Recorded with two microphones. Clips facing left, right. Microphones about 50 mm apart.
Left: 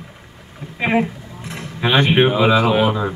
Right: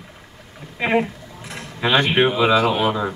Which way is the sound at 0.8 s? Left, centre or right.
Centre.